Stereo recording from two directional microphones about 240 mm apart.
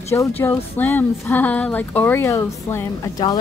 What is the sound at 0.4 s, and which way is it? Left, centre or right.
Music, centre.